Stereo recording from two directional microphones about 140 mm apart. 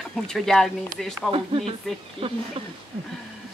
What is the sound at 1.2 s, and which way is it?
Speech, 40° right (ahead or behind).